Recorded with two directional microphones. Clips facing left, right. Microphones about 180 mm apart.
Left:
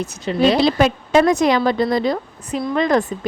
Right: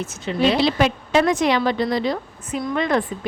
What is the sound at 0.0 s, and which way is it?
A woman's voice, 40° left (ahead or behind).